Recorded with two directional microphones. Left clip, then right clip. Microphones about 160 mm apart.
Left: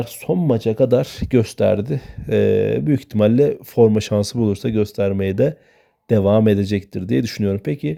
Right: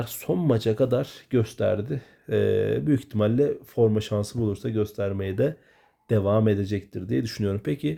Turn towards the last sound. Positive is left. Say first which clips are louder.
# left 5 dB
turn(degrees=35)  # may be behind; listen again after turning